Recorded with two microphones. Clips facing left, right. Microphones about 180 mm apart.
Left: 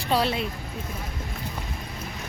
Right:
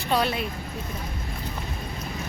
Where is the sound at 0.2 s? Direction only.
25° left (ahead or behind).